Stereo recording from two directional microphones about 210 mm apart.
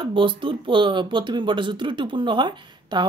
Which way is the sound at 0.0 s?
25° right (ahead or behind).